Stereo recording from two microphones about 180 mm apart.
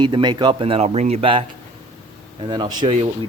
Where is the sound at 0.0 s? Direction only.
25° right (ahead or behind).